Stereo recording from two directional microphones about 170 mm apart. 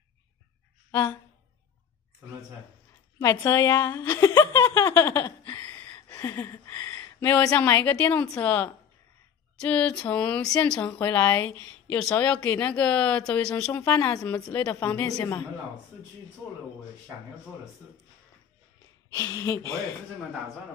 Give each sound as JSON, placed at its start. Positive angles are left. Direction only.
{"t": 3.2, "sound": "speech", "side_deg": 15}
{"t": 19.1, "sound": "speech", "side_deg": 20}